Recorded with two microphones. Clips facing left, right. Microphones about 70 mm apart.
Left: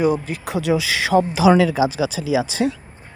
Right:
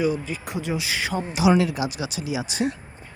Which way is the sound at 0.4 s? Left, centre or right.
Left.